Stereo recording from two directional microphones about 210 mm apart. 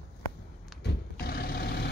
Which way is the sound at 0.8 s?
50° left (ahead or behind).